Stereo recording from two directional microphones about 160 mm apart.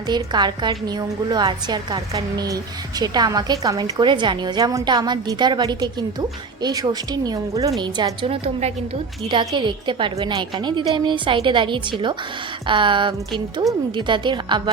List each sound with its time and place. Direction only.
0.1 s a woman's voice: 25° right (ahead or behind)